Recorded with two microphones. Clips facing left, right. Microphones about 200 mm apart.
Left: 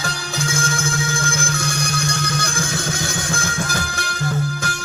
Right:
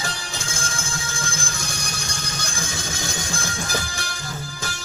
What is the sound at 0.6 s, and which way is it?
Music, 65° left (ahead or behind).